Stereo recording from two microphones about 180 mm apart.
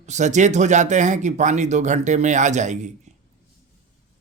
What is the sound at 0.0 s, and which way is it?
Speech, 40° right (ahead or behind).